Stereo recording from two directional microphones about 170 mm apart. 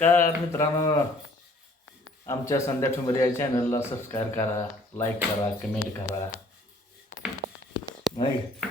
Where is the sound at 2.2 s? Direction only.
20° left (ahead or behind).